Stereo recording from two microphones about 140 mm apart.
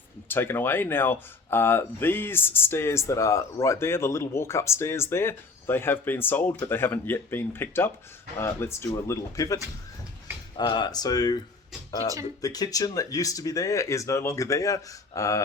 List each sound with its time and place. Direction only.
0.3 s speech: 15° left (ahead or behind)
10.6 s speech: 30° left (ahead or behind)
12.4 s speech: 25° left (ahead or behind)